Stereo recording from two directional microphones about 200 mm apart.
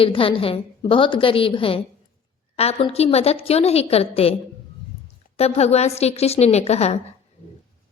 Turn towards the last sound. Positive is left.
turn(degrees=30)  # may be behind; listen again after turning